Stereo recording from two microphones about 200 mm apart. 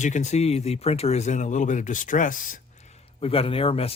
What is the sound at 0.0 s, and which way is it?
Speech, 35° left (ahead or behind).